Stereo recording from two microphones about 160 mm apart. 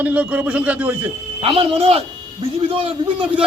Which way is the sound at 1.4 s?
35° right (ahead or behind).